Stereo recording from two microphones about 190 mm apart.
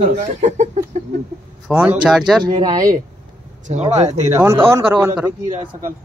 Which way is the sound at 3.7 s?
35° right (ahead or behind).